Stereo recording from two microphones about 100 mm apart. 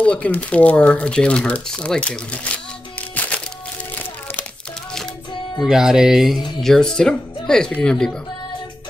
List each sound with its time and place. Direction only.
0.0 s speech: 15° left (ahead or behind)
3.0 s music: 15° left (ahead or behind)
3.9 s crumpling: 15° left (ahead or behind)
5.6 s speech: 5° right (ahead or behind)